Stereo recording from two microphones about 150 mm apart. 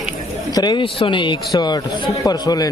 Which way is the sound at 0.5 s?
30° left (ahead or behind).